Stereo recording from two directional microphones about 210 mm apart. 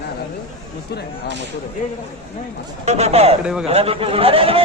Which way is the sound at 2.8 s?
30° right (ahead or behind).